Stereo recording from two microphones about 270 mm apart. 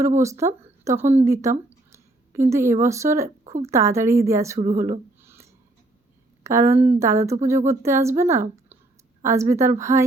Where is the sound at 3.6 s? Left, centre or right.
Centre.